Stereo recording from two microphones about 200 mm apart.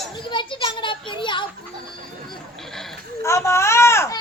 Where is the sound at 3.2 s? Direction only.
15° left (ahead or behind).